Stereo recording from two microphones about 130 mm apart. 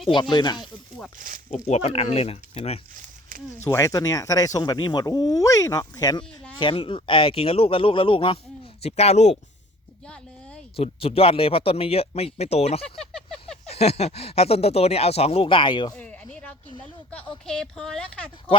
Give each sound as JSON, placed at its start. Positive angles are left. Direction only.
{"t": 0.1, "sound": "speech", "side_deg": 35}
{"t": 1.5, "sound": "speech", "side_deg": 60}
{"t": 2.9, "sound": "a sound", "side_deg": -90}
{"t": 3.6, "sound": "speech", "side_deg": 20}
{"t": 6.6, "sound": "speech", "side_deg": 40}
{"t": 8.8, "sound": "speech", "side_deg": 55}
{"t": 10.8, "sound": "speech", "side_deg": 50}
{"t": 13.0, "sound": "a sound", "side_deg": 5}
{"t": 13.7, "sound": "speech", "side_deg": 55}
{"t": 16.0, "sound": "a sound", "side_deg": 10}
{"t": 17.4, "sound": "a woman's voice", "side_deg": 5}